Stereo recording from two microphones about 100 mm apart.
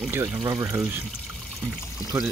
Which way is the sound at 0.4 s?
30° right (ahead or behind).